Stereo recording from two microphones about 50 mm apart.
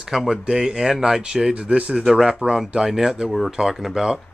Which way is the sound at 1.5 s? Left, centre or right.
Right.